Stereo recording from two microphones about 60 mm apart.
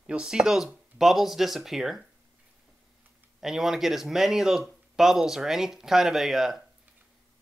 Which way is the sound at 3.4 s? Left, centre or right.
Centre.